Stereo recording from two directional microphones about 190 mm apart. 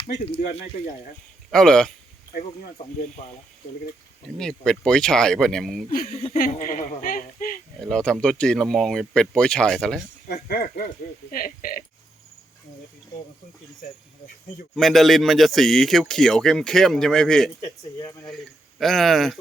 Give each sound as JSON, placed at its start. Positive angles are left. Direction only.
{"t": 0.6, "sound": "speech", "side_deg": 50}
{"t": 1.5, "sound": "speech", "side_deg": 5}
{"t": 2.4, "sound": "speech", "side_deg": 30}
{"t": 4.4, "sound": "speech", "side_deg": 5}
{"t": 6.1, "sound": "speech", "side_deg": 30}
{"t": 6.3, "sound": "speech", "side_deg": 45}
{"t": 7.8, "sound": "speech", "side_deg": 5}
{"t": 10.5, "sound": "speech", "side_deg": 45}
{"t": 14.8, "sound": "speech", "side_deg": 0}
{"t": 17.6, "sound": "speech", "side_deg": 15}
{"t": 18.8, "sound": "speech", "side_deg": 0}